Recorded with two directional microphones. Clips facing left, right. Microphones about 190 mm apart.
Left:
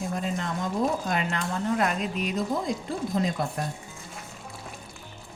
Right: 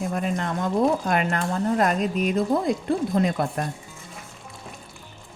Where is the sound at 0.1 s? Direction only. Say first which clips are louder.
Right 4 dB; 60° right (ahead or behind).